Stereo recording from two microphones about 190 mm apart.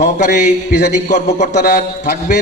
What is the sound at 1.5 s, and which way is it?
Speech, 55° left (ahead or behind).